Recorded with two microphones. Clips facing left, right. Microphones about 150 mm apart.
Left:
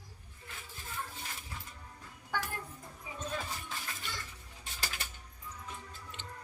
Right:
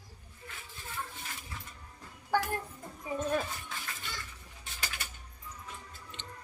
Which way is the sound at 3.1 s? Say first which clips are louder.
Right 12 dB; 50° right (ahead or behind).